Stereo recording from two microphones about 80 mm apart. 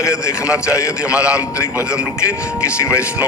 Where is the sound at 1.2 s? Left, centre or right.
Left.